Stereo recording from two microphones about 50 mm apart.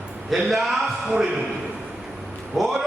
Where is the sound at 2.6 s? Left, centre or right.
Centre.